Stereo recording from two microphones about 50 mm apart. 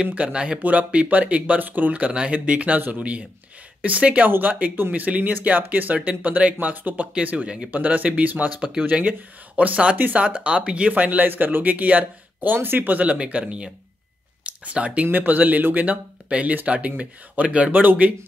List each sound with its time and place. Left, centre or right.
0.0 s speech: right
10.9 s speech: right
14.4 s a sound: right
15.0 s speech: right